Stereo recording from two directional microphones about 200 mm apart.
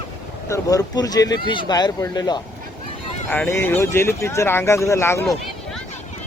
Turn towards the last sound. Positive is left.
turn(degrees=15)  # may be behind; listen again after turning